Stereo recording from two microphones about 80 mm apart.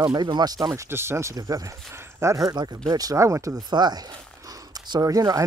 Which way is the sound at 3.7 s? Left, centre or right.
Right.